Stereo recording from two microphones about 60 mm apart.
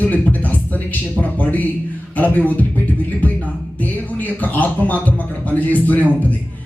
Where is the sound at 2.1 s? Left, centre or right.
Left.